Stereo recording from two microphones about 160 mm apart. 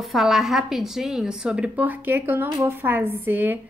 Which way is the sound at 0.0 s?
Centre (ahead or behind).